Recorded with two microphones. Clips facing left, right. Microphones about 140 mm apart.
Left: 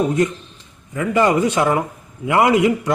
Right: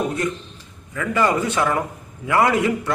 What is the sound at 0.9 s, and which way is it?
A man's voice, 20° left (ahead or behind).